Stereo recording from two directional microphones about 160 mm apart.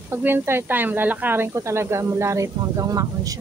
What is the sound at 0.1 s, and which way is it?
Speech, 15° right (ahead or behind).